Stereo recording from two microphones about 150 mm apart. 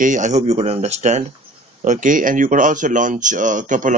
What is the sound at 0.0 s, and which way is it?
Speech, 55° right (ahead or behind).